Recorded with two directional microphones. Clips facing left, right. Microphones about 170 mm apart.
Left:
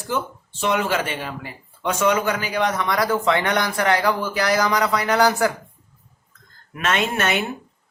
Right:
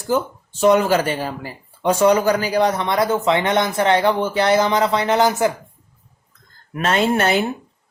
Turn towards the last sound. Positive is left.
turn(degrees=-35)  # may be behind; listen again after turning